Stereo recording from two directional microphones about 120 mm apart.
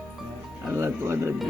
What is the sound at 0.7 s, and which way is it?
Speech, 20° right (ahead or behind).